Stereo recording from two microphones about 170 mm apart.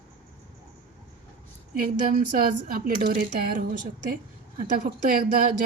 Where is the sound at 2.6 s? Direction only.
55° right (ahead or behind).